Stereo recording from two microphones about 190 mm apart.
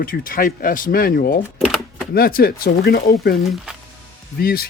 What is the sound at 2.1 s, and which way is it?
Speech, 50° left (ahead or behind).